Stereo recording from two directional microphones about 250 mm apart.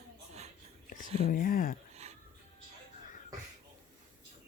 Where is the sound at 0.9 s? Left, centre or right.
Left.